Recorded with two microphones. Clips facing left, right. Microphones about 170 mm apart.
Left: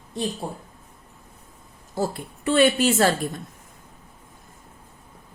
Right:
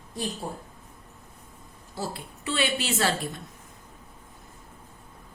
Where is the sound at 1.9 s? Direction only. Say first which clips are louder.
Left 8 dB; 50° left (ahead or behind).